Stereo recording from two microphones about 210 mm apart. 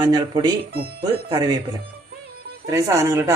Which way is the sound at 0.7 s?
45° right (ahead or behind).